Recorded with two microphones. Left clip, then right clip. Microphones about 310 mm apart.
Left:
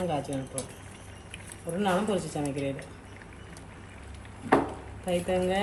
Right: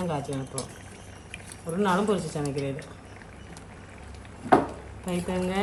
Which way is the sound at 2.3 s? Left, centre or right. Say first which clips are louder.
Right 1 dB; centre.